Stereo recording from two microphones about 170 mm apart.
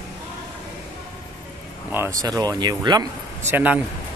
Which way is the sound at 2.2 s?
20° right (ahead or behind).